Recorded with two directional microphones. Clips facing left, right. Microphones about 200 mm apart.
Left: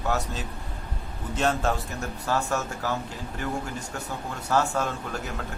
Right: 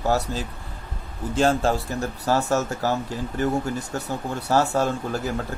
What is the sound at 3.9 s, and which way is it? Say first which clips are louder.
A man's voice: right 6 dB; 35° right (ahead or behind).